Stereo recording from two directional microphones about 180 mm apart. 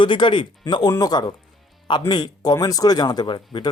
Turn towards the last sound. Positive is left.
turn(degrees=25)  # may be behind; listen again after turning